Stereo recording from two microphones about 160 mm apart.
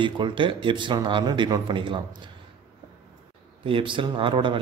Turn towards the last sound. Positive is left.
turn(degrees=-30)  # may be behind; listen again after turning